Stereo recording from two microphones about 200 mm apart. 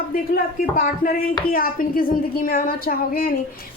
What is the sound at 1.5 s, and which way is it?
A woman's voice, 45° left (ahead or behind).